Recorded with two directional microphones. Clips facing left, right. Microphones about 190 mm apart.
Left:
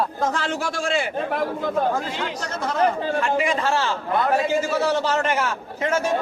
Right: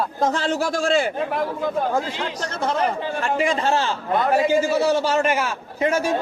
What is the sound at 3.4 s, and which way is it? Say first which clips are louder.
A man's voice: right 2 dB; 25° right (ahead or behind).